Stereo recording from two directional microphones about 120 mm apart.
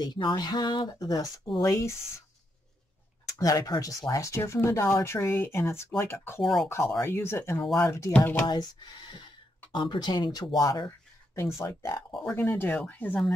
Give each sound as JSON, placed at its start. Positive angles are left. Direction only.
{"t": 0.0, "sound": "speech", "side_deg": 35}
{"t": 3.3, "sound": "speech", "side_deg": 30}
{"t": 9.7, "sound": "speech", "side_deg": 40}
{"t": 10.6, "sound": "a sound", "side_deg": 30}
{"t": 11.5, "sound": "speech", "side_deg": 25}